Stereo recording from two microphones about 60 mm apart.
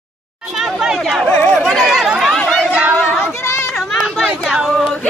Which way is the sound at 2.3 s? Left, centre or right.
Centre.